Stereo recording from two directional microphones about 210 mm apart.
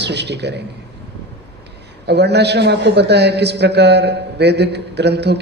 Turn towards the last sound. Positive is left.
turn(degrees=-55)  # may be behind; listen again after turning